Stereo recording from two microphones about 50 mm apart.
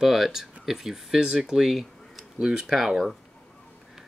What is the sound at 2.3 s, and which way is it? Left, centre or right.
Speech, centre.